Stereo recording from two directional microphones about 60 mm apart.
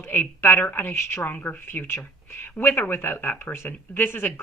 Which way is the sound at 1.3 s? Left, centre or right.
Left.